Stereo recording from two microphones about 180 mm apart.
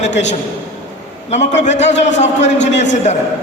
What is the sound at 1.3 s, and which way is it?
A man's voice, 40° left (ahead or behind).